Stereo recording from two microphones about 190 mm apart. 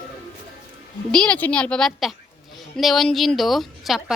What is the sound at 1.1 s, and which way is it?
A woman's voice, 5° left (ahead or behind).